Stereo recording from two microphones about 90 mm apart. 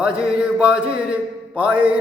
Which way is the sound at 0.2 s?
10° right (ahead or behind).